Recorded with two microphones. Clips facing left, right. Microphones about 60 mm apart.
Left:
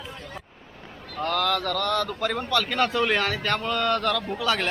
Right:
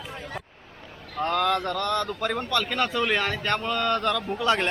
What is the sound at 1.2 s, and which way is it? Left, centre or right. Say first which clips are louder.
Speech: right 1 dB; centre.